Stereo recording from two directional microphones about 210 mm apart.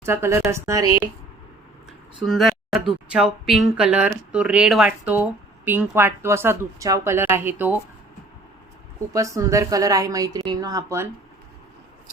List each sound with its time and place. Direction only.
0.0 s speech: 10° right (ahead or behind)
2.2 s a sound: centre (ahead or behind)
3.1 s speech: 5° right (ahead or behind)
9.1 s speech: 15° right (ahead or behind)